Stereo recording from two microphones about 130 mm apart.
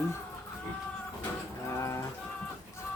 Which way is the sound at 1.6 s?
20° left (ahead or behind).